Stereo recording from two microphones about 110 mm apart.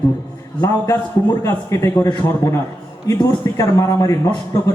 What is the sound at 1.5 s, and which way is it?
A man's voice, 25° left (ahead or behind).